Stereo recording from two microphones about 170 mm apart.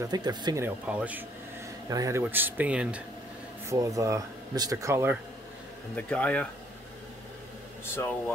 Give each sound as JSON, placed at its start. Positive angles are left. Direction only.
{"t": 0.0, "sound": "speech", "side_deg": -25}
{"t": 1.9, "sound": "speech", "side_deg": -20}
{"t": 3.6, "sound": "speech", "side_deg": -20}
{"t": 5.9, "sound": "speech", "side_deg": 5}
{"t": 7.8, "sound": "speech", "side_deg": 15}